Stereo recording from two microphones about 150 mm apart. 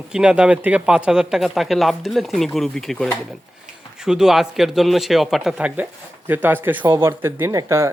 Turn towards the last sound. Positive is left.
turn(degrees=-20)  # may be behind; listen again after turning